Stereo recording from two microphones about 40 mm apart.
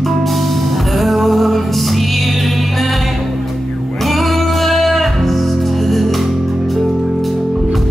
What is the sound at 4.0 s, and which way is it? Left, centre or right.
Music, centre.